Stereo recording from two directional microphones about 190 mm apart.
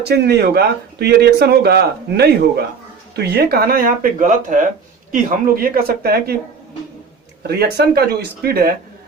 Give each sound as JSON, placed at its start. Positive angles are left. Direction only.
{"t": 0.0, "sound": "speech", "side_deg": -60}
{"t": 7.4, "sound": "speech", "side_deg": -55}